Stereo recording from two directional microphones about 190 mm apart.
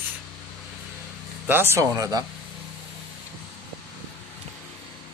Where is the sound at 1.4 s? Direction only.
10° right (ahead or behind).